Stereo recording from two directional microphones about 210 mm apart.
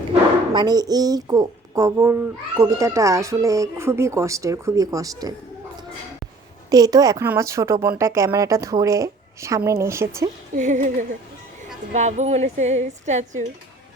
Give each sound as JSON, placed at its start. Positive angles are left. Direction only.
{"t": 0.5, "sound": "a woman's voice", "side_deg": -20}
{"t": 6.7, "sound": "a woman's voice", "side_deg": -15}
{"t": 10.5, "sound": "speech", "side_deg": -35}
{"t": 11.9, "sound": "speech", "side_deg": -35}